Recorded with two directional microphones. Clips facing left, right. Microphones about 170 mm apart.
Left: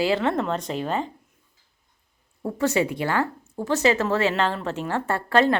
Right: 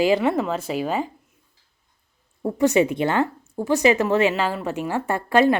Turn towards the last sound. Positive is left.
turn(degrees=-15)  # may be behind; listen again after turning